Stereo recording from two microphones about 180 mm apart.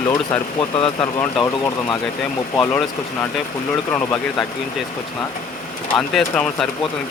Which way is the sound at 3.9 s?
10° left (ahead or behind).